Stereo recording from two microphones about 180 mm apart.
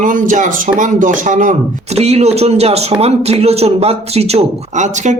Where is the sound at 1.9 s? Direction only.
35° right (ahead or behind).